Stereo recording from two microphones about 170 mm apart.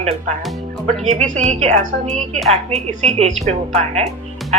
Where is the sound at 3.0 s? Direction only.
40° right (ahead or behind).